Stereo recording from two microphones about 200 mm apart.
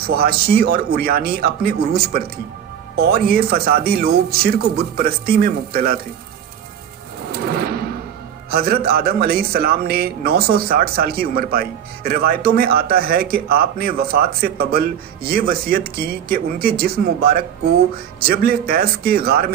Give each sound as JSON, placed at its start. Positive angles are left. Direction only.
{"t": 0.0, "sound": "a man's voice", "side_deg": -50}
{"t": 7.3, "sound": "a sound", "side_deg": -50}
{"t": 8.5, "sound": "a man's voice", "side_deg": -50}